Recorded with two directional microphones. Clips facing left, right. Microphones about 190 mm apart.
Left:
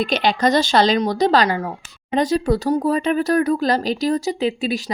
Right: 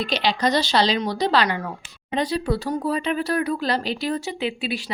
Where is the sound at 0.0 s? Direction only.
50° left (ahead or behind).